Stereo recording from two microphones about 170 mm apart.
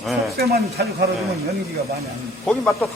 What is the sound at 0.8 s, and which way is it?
Speech, 65° right (ahead or behind).